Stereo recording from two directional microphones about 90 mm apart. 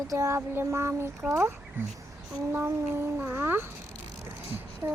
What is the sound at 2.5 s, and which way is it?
Speech, 25° right (ahead or behind).